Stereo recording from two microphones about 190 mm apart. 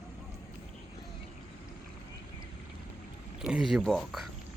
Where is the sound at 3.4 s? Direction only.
5° right (ahead or behind).